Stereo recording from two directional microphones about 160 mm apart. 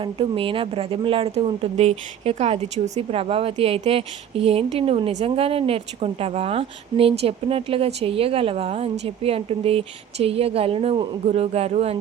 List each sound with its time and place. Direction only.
0.0 s speech: 35° right (ahead or behind)